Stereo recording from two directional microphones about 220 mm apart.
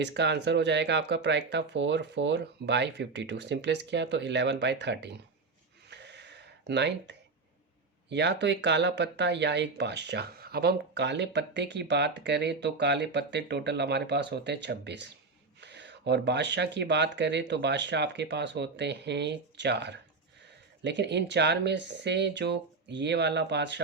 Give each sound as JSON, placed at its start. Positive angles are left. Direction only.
{"t": 0.0, "sound": "speech", "side_deg": -50}
{"t": 5.9, "sound": "a sound", "side_deg": -50}
{"t": 8.1, "sound": "speech", "side_deg": -50}